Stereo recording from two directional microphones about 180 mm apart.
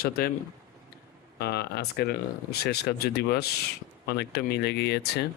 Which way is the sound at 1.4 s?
65° left (ahead or behind).